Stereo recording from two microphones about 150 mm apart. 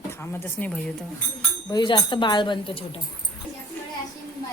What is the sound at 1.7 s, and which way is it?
Speech, 30° left (ahead or behind).